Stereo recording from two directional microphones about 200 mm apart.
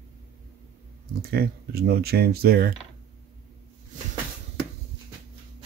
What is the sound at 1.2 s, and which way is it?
Speech, 50° right (ahead or behind).